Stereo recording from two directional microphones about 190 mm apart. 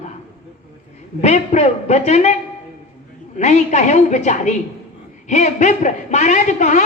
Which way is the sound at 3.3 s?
35° left (ahead or behind).